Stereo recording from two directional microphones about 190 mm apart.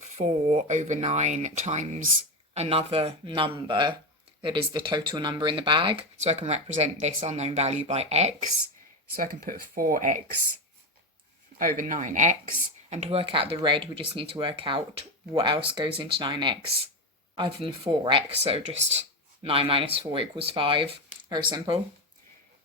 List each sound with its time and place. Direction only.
0.0 s speech: 35° right (ahead or behind)
9.1 s speech: 50° right (ahead or behind)
11.5 s speech: 45° right (ahead or behind); by 21.8 s 20° right (ahead or behind)